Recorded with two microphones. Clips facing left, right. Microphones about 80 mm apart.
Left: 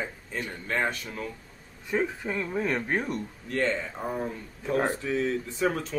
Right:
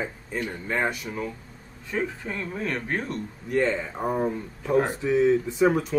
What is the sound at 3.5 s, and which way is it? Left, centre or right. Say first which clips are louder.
Speech: right 4 dB; centre.